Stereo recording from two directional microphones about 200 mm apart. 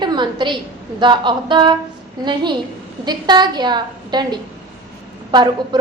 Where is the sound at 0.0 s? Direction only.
20° right (ahead or behind).